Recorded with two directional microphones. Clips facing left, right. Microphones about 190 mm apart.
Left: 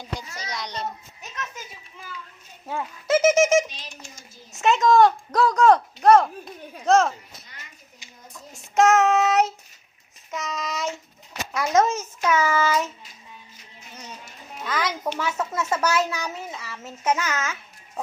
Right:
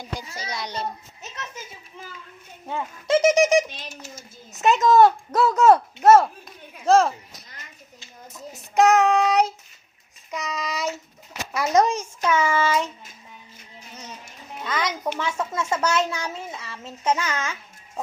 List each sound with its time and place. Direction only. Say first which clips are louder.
0.2 s a child's voice: right 1 dB; 30° right (ahead or behind)
0.6 s speech: right 2 dB; 5° right (ahead or behind)
2.6 s speech: even; 5° left (ahead or behind)
8.7 s a child's voice: even; centre (ahead or behind)
14.6 s a child's voice: even; 10° left (ahead or behind)